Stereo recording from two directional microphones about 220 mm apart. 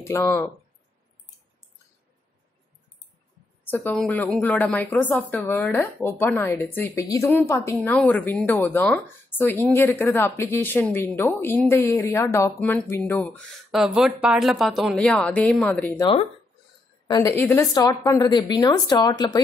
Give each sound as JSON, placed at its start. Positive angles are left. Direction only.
{"t": 0.0, "sound": "a woman's voice", "side_deg": 10}
{"t": 3.6, "sound": "a woman's voice", "side_deg": 10}
{"t": 17.1, "sound": "a woman's voice", "side_deg": 15}